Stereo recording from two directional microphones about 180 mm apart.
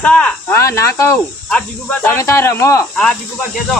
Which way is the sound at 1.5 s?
5° left (ahead or behind).